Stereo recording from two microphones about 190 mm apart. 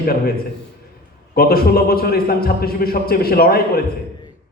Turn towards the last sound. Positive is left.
turn(degrees=55)  # may be behind; listen again after turning